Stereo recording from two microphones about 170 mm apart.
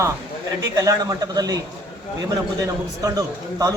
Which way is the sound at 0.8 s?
20° right (ahead or behind).